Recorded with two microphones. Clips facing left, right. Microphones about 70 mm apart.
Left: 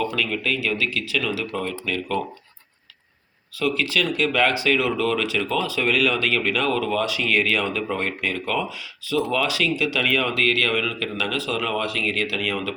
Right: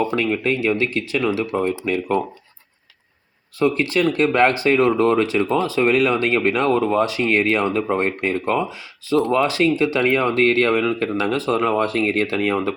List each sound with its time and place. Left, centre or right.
0.0 s speech: right
3.6 s speech: right